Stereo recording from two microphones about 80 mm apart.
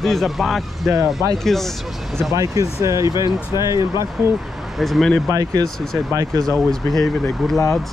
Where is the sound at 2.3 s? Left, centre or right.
Right.